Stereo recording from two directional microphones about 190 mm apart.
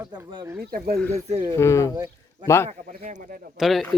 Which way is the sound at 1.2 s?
35° right (ahead or behind).